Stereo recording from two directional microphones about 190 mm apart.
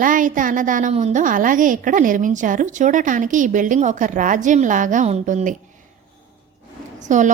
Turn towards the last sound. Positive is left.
turn(degrees=-40)  # may be behind; listen again after turning